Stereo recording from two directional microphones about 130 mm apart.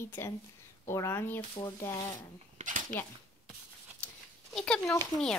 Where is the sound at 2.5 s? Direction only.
75° right (ahead or behind).